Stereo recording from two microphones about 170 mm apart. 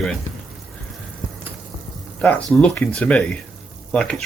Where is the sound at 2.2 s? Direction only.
5° left (ahead or behind).